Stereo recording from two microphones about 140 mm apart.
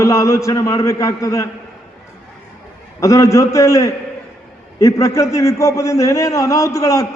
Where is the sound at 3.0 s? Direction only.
20° left (ahead or behind).